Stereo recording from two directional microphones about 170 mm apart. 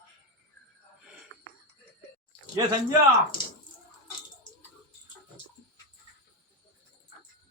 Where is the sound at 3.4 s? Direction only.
25° left (ahead or behind).